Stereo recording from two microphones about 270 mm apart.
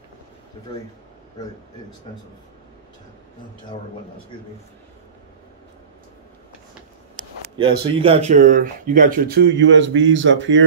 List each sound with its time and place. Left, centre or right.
7.2 s speech: centre; by 10.6 s right